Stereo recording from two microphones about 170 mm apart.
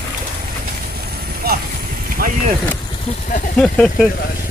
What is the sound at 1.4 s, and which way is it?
Vehicle, 65° right (ahead or behind).